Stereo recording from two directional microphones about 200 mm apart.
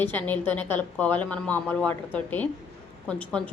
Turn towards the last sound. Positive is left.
turn(degrees=5)  # may be behind; listen again after turning